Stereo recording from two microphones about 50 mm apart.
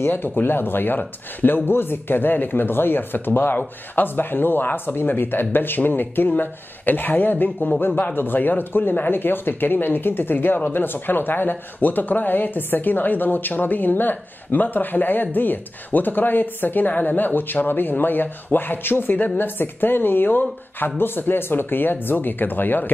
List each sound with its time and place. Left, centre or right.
0.1 s speech: left